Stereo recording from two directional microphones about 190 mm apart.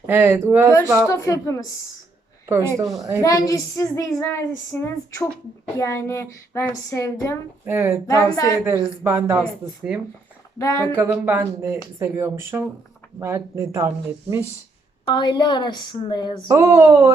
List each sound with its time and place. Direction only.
0.1 s speech: 10° right (ahead or behind)
1.0 s a woman's voice: 15° left (ahead or behind)
2.5 s speech: 15° right (ahead or behind)
3.2 s a woman's voice: 15° left (ahead or behind)
7.6 s speech: 15° right (ahead or behind)
8.0 s a woman's voice: 15° left (ahead or behind)
9.0 s speech: 15° right (ahead or behind)
10.6 s a woman's voice: 15° left (ahead or behind)
10.9 s speech: 10° right (ahead or behind)
15.0 s a woman's voice: 25° left (ahead or behind)
16.5 s speech: 15° right (ahead or behind)